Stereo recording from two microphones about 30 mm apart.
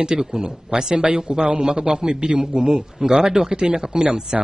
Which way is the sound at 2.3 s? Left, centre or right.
Right.